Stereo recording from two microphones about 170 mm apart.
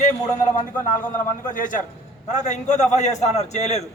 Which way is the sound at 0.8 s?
50° left (ahead or behind).